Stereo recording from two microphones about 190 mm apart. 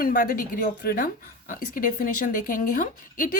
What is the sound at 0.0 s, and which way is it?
Speech, 50° left (ahead or behind).